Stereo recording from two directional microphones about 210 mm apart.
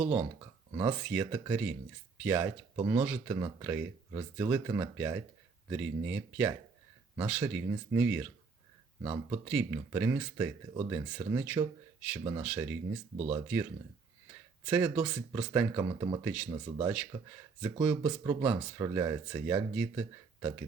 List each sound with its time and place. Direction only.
0.8 s speech: 10° right (ahead or behind)
9.3 s speech: 10° right (ahead or behind)
14.7 s speech: 10° right (ahead or behind)